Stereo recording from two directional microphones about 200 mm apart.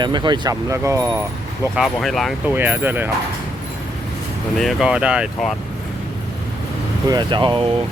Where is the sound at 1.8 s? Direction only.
Centre (ahead or behind).